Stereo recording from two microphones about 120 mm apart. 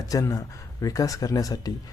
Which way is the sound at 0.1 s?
30° left (ahead or behind).